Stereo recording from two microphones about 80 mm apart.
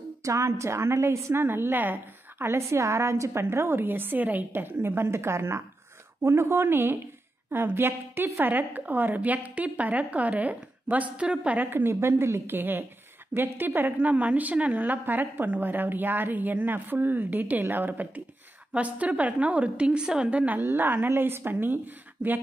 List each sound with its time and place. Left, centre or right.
0.2 s a woman's voice: right